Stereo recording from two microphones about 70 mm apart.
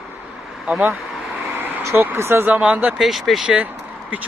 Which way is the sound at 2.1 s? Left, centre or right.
Right.